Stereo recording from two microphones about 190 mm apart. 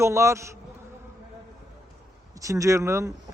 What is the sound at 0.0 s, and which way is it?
Speech, 15° right (ahead or behind).